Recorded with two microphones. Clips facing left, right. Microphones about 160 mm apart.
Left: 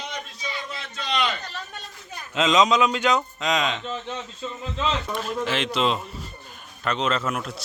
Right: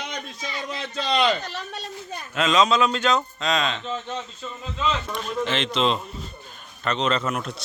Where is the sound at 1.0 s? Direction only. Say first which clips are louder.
Right 4 dB; 30° right (ahead or behind).